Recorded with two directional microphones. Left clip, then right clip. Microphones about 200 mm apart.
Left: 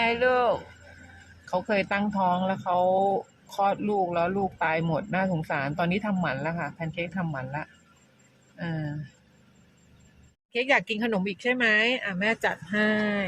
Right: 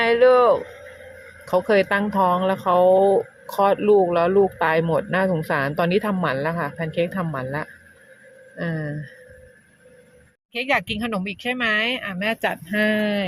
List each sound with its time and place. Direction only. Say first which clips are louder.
0.0 s a sound: right 8 dB; 15° right (ahead or behind)
1.5 s a woman's voice: right 8 dB; 20° right (ahead or behind)
10.5 s speech: right 2 dB; 5° right (ahead or behind)